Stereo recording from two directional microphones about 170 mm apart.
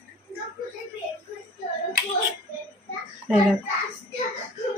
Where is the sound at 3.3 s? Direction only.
Centre (ahead or behind).